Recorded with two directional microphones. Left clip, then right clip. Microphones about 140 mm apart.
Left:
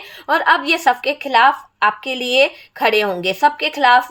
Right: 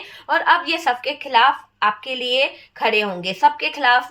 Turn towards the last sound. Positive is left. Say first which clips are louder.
# left 4 dB
turn(degrees=50)  # may be behind; listen again after turning